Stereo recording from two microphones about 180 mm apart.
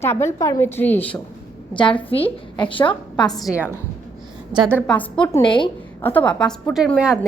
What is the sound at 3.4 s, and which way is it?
Speech, 10° right (ahead or behind).